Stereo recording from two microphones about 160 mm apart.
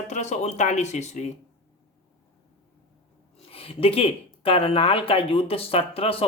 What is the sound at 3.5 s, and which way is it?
Speech, 35° left (ahead or behind).